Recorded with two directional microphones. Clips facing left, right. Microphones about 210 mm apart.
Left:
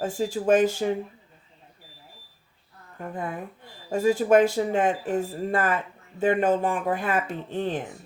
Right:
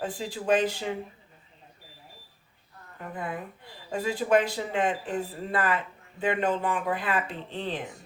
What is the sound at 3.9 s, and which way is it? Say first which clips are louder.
Speech: left 5 dB; 45° left (ahead or behind).